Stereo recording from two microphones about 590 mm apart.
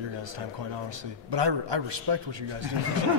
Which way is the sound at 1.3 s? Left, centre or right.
Right.